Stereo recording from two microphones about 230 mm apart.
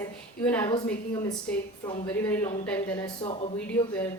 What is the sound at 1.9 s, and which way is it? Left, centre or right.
Speech, centre.